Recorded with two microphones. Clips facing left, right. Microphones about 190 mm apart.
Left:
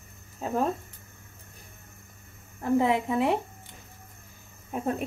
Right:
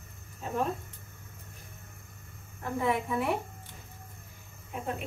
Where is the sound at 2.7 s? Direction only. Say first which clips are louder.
Left 5 dB; 20° left (ahead or behind).